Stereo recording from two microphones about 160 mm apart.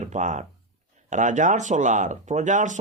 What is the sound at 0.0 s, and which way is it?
Speech, 50° right (ahead or behind).